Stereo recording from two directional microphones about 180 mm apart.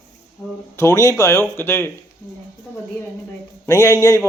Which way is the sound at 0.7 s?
15° left (ahead or behind).